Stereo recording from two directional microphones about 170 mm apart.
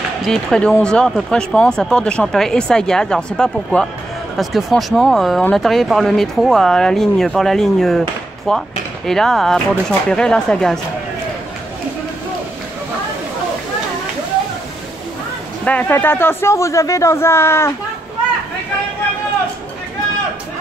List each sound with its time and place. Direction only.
0.2 s speech: 5° left (ahead or behind)
15.6 s speech: 10° left (ahead or behind)